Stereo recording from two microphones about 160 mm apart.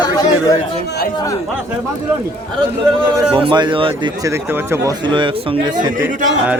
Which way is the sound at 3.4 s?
30° right (ahead or behind).